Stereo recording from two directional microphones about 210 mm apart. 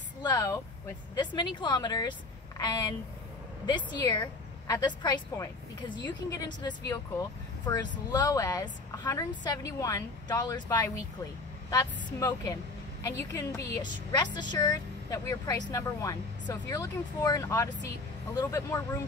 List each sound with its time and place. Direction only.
0.2 s a woman's voice: 15° left (ahead or behind)